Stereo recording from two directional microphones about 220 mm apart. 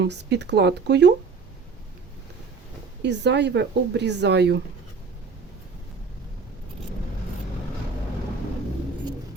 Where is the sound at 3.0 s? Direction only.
50° right (ahead or behind).